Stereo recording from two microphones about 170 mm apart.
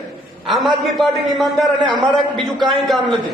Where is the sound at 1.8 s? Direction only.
25° right (ahead or behind).